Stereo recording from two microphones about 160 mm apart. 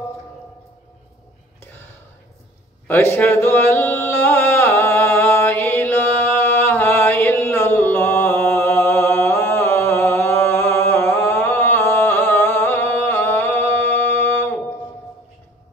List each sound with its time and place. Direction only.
2.9 s a man's voice: 15° left (ahead or behind)
3.3 s chant: 15° left (ahead or behind)